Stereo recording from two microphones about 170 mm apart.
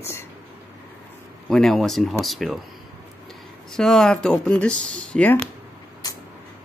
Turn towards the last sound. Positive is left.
turn(degrees=5)  # may be behind; listen again after turning